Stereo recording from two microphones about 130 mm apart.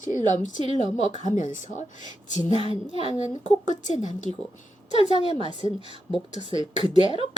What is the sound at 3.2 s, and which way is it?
Speech, 65° left (ahead or behind).